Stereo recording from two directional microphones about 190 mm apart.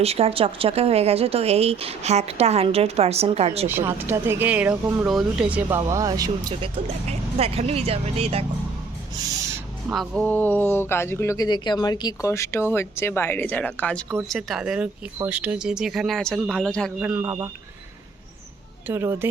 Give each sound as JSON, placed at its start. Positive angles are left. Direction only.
{"t": 0.0, "sound": "speech", "side_deg": -30}
{"t": 3.7, "sound": "speech", "side_deg": -10}
{"t": 9.9, "sound": "speech", "side_deg": 0}
{"t": 17.2, "sound": "speech", "side_deg": -20}
{"t": 18.9, "sound": "speech", "side_deg": -15}